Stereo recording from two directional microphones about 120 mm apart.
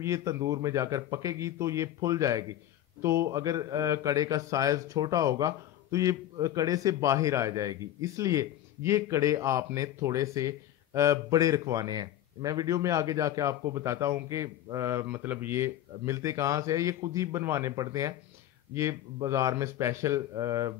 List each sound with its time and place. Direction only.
0.0 s a man's voice: 25° right (ahead or behind)
19.2 s a man's voice: 25° right (ahead or behind)